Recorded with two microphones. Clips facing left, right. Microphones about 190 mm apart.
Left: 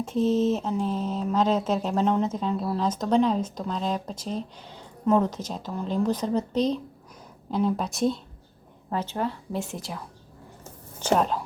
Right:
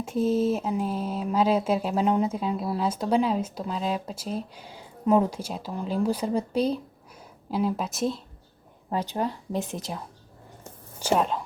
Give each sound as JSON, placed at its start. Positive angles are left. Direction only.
{"t": 0.0, "sound": "speech", "side_deg": -10}
{"t": 8.9, "sound": "a woman's voice", "side_deg": -15}
{"t": 11.0, "sound": "speech", "side_deg": -5}